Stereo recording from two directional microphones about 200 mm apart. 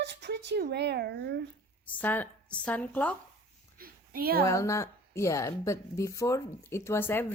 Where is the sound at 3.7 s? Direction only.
45° right (ahead or behind).